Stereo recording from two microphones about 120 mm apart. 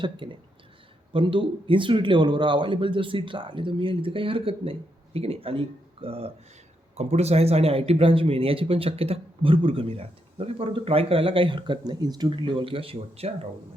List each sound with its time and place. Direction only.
0.0 s speech: 40° right (ahead or behind)
6.9 s speech: 65° right (ahead or behind); by 12.3 s 35° right (ahead or behind)
12.3 s speech: 45° right (ahead or behind)